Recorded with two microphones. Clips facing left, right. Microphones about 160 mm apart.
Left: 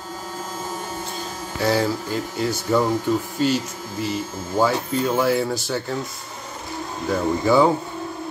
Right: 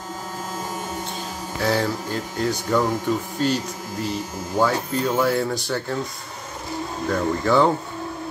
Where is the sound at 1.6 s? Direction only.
Centre (ahead or behind).